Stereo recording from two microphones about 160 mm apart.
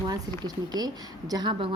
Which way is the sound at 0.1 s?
25° right (ahead or behind).